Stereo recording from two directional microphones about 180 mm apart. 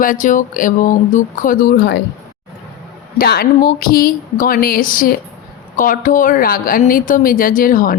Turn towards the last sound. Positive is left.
turn(degrees=50)  # may be behind; listen again after turning